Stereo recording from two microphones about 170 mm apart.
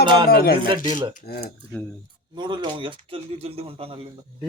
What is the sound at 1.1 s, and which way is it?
Speech, 65° left (ahead or behind).